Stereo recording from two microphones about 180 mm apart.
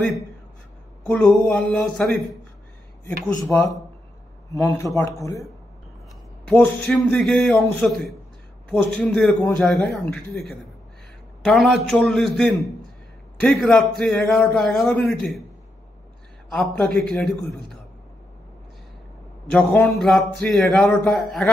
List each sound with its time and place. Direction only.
1.0 s a man's voice: 10° left (ahead or behind)
3.4 s a man's voice: 15° left (ahead or behind)
11.4 s a man's voice: centre (ahead or behind)
16.4 s a man's voice: centre (ahead or behind)
19.4 s a man's voice: 10° left (ahead or behind)